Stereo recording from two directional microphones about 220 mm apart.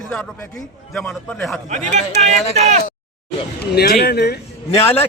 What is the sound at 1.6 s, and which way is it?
Speech, 35° right (ahead or behind).